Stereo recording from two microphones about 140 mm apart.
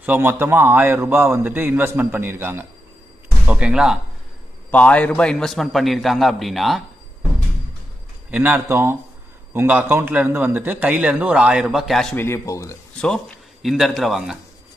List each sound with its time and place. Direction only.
0.0 s a man's voice: 15° right (ahead or behind)
4.6 s a man's voice: 10° left (ahead or behind)
8.3 s a man's voice: 10° right (ahead or behind)
12.2 s a man's voice: 20° left (ahead or behind)
13.0 s a man's voice: centre (ahead or behind)